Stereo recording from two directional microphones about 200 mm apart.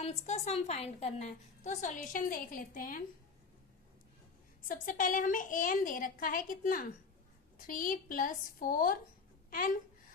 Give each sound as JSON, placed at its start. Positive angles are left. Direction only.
{"t": 0.0, "sound": "a woman's voice", "side_deg": 35}
{"t": 4.7, "sound": "a woman's voice", "side_deg": 40}